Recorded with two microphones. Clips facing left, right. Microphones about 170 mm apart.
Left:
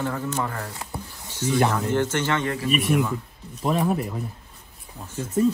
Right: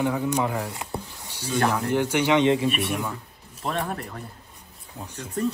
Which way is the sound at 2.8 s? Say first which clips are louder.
Left 5 dB; centre (ahead or behind).